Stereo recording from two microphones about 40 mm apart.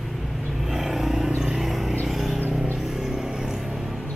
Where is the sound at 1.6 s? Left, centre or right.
Centre.